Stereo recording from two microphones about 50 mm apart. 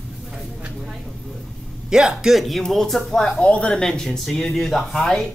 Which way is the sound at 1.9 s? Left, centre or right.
Centre.